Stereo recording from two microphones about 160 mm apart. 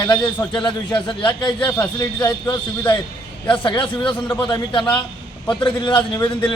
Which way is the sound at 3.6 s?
30° left (ahead or behind).